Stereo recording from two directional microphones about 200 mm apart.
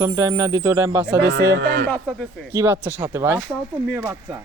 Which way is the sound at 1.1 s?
60° right (ahead or behind).